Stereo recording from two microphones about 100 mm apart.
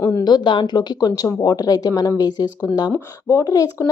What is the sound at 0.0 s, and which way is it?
A woman's voice, 40° left (ahead or behind).